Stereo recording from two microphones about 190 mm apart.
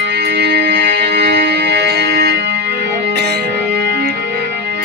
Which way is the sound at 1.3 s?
55° right (ahead or behind).